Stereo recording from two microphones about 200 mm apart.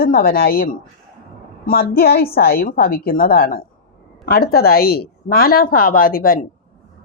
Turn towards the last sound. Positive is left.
turn(degrees=45)  # may be behind; listen again after turning